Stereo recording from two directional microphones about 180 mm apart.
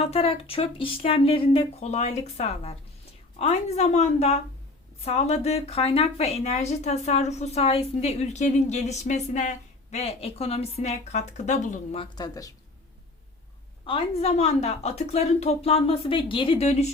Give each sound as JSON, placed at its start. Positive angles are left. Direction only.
{"t": 0.1, "sound": "speech", "side_deg": 35}
{"t": 12.1, "sound": "speech", "side_deg": 20}
{"t": 13.8, "sound": "speech", "side_deg": 30}